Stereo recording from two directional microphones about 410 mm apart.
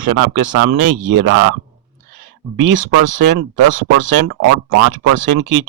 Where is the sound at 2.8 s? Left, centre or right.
Right.